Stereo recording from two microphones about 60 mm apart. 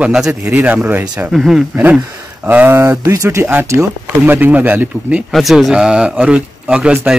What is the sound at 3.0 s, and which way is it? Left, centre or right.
Speech, right.